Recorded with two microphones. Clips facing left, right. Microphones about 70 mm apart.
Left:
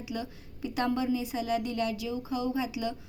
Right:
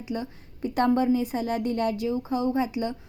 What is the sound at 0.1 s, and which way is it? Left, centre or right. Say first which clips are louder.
A woman's voice: right 6 dB; right.